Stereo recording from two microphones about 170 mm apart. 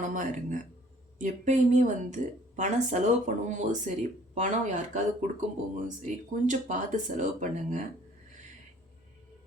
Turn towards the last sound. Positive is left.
turn(degrees=-45)  # may be behind; listen again after turning